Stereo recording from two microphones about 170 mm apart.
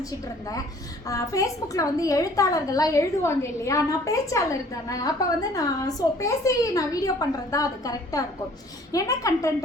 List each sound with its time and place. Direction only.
1.0 s a woman's voice: 20° left (ahead or behind)